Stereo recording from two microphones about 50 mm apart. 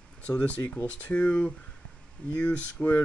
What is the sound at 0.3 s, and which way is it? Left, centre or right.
Speech, left.